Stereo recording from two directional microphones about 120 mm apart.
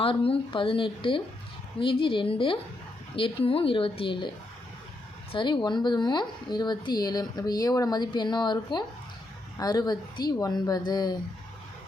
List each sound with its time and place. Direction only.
0.0 s a woman's voice: 50° left (ahead or behind)
5.3 s a woman's voice: 45° left (ahead or behind)